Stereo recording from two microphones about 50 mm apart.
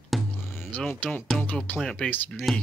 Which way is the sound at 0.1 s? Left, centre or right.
Centre.